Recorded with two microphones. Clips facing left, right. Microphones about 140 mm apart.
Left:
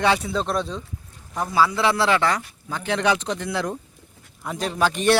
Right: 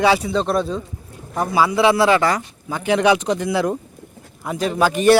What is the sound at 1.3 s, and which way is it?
Speech, 60° right (ahead or behind).